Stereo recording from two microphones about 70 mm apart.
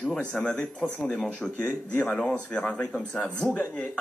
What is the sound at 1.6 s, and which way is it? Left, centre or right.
Speech, left.